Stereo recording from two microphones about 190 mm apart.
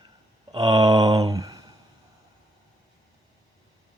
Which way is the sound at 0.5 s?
20° right (ahead or behind).